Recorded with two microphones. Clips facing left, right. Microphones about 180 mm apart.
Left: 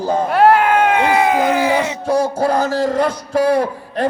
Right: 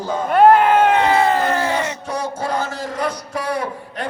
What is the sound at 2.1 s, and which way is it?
Speech, 30° left (ahead or behind).